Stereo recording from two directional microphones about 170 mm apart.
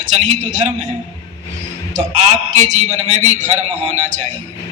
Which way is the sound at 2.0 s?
45° right (ahead or behind).